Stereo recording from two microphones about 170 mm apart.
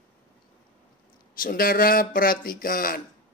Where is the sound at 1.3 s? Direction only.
55° left (ahead or behind).